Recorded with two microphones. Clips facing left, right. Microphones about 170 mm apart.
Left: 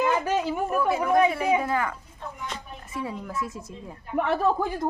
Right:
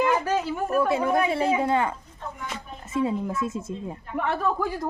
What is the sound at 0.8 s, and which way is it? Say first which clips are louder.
A woman's voice: left 1 dB; 25° right (ahead or behind).